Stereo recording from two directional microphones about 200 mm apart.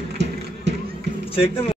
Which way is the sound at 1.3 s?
30° left (ahead or behind).